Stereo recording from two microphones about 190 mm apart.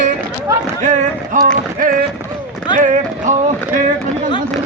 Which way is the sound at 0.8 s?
40° right (ahead or behind).